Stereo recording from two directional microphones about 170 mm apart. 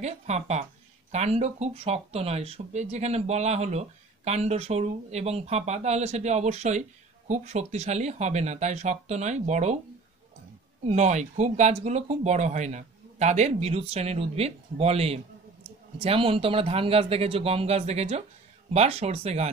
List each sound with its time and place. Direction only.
0.0 s speech: 40° right (ahead or behind)
10.9 s speech: 45° right (ahead or behind)